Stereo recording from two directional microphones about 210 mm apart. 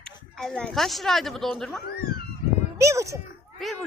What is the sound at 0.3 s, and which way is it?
Speech, centre (ahead or behind).